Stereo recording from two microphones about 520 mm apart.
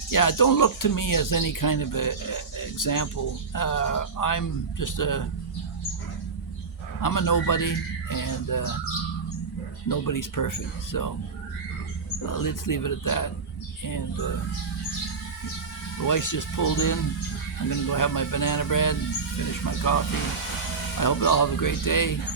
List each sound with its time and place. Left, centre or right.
0.1 s speech: left
7.0 s speech: left
9.9 s speech: left
12.3 s speech: left
16.0 s speech: left